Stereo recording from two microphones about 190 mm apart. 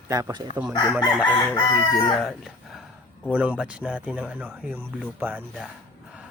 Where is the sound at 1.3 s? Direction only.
25° left (ahead or behind).